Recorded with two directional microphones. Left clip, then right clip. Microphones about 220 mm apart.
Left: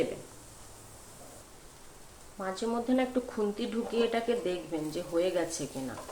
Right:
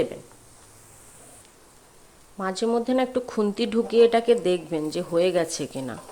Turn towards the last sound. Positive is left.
turn(degrees=-50)  # may be behind; listen again after turning